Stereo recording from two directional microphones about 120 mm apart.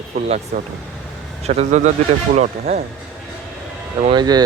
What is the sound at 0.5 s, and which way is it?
Speech, 90° right.